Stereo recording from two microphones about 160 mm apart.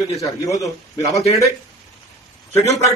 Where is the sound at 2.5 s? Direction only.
20° left (ahead or behind).